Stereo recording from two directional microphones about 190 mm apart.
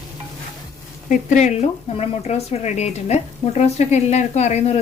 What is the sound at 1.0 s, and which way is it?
Speech, 40° left (ahead or behind).